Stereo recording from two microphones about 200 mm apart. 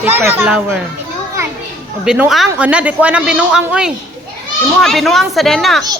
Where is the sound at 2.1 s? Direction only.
Centre (ahead or behind).